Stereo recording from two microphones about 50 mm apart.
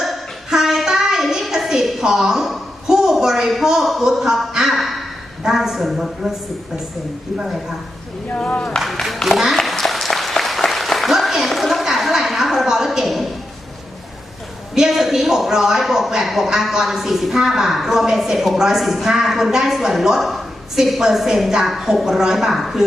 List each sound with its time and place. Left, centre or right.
0.0 s a sound: centre
5.4 s a woman's voice: centre
8.5 s speech: left
8.8 s a woman's voice: centre
9.2 s applause: centre
14.8 s a woman's voice: centre